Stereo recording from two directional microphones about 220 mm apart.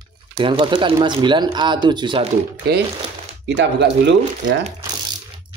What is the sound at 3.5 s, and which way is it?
Speech, 55° right (ahead or behind).